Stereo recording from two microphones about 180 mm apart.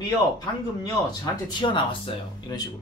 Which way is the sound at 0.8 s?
25° left (ahead or behind).